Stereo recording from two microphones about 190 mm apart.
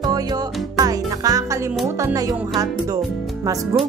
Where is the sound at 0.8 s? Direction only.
20° right (ahead or behind).